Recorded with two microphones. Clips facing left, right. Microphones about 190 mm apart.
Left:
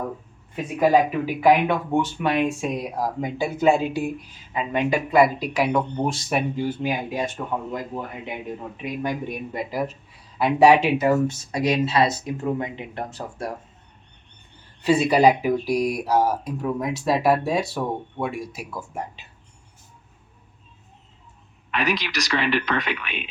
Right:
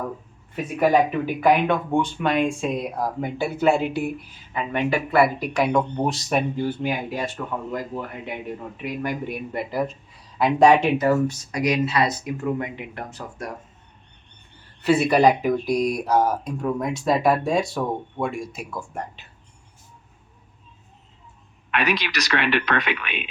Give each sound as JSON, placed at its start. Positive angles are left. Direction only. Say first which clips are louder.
{"t": 0.5, "sound": "speech", "louder": "even", "side_deg": 10}
{"t": 5.5, "sound": "speech", "louder": "right 1 dB", "side_deg": 5}
{"t": 6.6, "sound": "speech", "louder": "even", "side_deg": 10}
{"t": 11.0, "sound": "speech", "louder": "even", "side_deg": 20}
{"t": 14.8, "sound": "speech", "louder": "even", "side_deg": 15}
{"t": 21.7, "sound": "speech", "louder": "right 1 dB", "side_deg": -65}